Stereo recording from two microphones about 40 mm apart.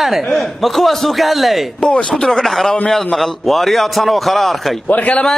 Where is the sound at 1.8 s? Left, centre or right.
Left.